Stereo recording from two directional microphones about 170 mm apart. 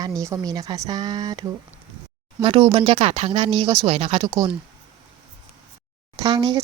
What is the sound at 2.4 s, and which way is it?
Speech, 30° right (ahead or behind).